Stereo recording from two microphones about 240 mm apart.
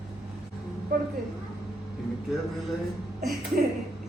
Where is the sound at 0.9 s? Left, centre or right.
Right.